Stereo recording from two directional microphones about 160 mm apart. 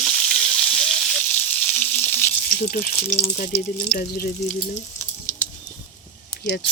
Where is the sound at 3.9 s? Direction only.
65° left (ahead or behind).